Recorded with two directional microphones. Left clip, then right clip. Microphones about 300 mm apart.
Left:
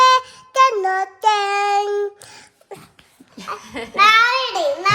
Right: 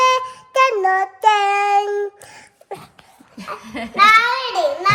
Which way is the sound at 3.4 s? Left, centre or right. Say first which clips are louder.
Even; left.